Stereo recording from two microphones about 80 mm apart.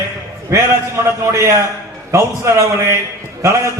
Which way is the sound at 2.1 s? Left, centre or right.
Right.